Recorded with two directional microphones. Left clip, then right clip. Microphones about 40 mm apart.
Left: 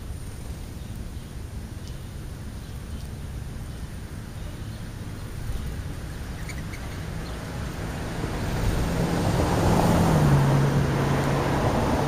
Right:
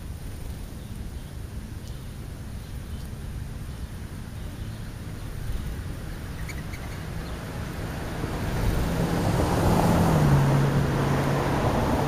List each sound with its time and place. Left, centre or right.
7.0 s vehicle: centre
9.6 s vehicle: left